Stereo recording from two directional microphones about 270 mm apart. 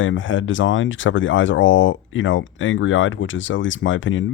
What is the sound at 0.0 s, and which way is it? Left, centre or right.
Speech, left.